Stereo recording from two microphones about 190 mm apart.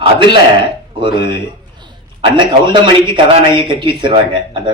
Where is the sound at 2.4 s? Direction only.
25° right (ahead or behind).